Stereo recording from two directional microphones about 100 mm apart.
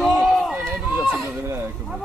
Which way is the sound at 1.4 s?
25° right (ahead or behind).